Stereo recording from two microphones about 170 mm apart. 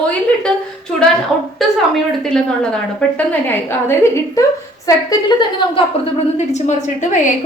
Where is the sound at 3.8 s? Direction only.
15° left (ahead or behind).